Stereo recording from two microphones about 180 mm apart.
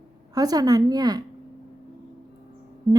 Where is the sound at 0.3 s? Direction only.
20° right (ahead or behind).